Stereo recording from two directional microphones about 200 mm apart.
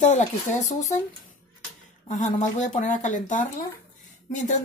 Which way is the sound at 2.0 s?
35° left (ahead or behind).